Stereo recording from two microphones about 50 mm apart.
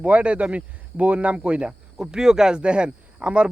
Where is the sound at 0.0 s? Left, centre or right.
Right.